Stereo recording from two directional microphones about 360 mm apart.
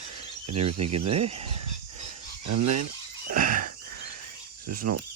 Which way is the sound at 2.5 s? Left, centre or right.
Right.